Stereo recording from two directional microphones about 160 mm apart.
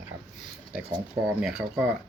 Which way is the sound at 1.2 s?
10° right (ahead or behind).